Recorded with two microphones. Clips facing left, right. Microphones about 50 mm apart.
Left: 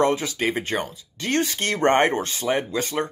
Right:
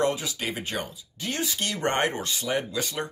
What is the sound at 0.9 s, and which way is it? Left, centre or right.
Speech, left.